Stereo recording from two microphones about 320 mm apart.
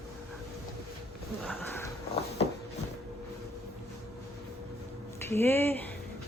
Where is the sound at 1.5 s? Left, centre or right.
Centre.